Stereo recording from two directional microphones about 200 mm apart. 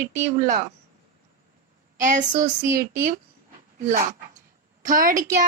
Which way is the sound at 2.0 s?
40° right (ahead or behind).